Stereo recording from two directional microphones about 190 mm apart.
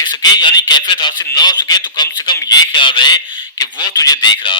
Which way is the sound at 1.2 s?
20° left (ahead or behind).